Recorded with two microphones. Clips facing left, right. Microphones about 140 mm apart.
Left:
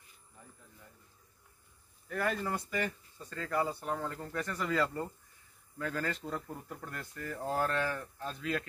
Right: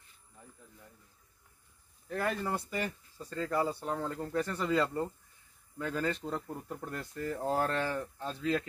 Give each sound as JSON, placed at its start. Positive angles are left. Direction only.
{"t": 2.0, "sound": "speech", "side_deg": -25}